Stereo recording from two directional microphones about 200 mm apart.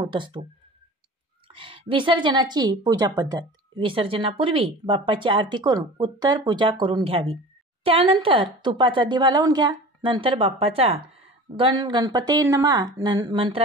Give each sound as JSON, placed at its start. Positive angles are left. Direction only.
{"t": 0.0, "sound": "a woman's voice", "side_deg": -25}
{"t": 1.5, "sound": "a woman's voice", "side_deg": -25}